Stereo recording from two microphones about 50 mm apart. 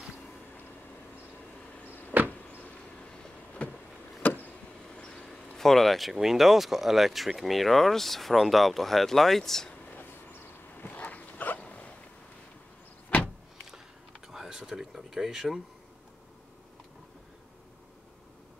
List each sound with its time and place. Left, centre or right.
2.1 s vehicle: right
3.2 s vehicle: left
4.2 s vehicle: left
4.9 s vehicle: left
5.6 s speech: centre
10.8 s dog: left
11.6 s a sound: left
14.2 s a sound: centre